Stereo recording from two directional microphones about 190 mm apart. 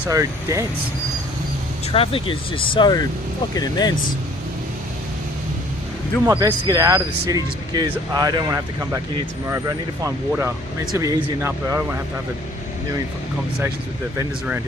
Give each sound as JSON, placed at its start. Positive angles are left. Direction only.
{"t": 0.0, "sound": "speech", "side_deg": -15}
{"t": 1.9, "sound": "speech", "side_deg": 30}
{"t": 6.2, "sound": "speech", "side_deg": -15}
{"t": 14.2, "sound": "speech", "side_deg": -10}